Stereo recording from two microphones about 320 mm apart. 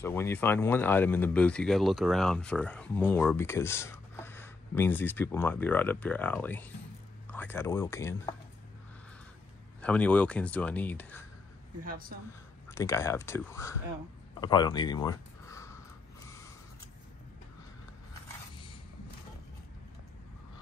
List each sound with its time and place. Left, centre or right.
0.0 s speech: centre
9.8 s speech: centre
11.8 s speech: right
12.6 s speech: centre